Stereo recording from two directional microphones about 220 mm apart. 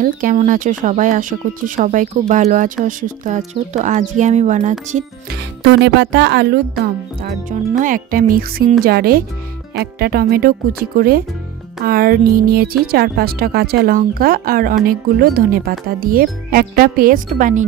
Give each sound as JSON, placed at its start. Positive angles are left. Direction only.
{"t": 0.0, "sound": "speech", "side_deg": -40}
{"t": 5.3, "sound": "speech", "side_deg": -50}